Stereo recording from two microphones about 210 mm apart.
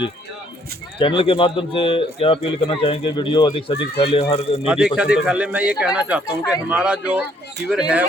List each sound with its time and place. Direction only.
0.9 s speech: 25° left (ahead or behind)
4.6 s speech: 5° right (ahead or behind)